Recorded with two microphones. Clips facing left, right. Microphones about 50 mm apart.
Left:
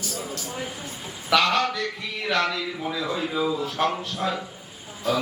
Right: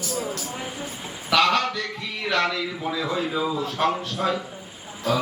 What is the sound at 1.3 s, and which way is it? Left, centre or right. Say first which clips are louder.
A man's voice: right 1 dB; centre.